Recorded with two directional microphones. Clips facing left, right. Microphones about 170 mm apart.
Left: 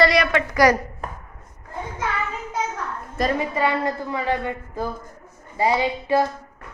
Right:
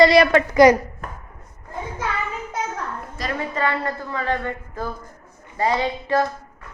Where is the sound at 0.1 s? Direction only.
35° right (ahead or behind).